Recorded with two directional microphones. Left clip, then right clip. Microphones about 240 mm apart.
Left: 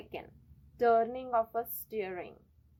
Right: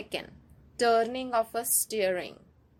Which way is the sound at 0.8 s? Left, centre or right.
Right.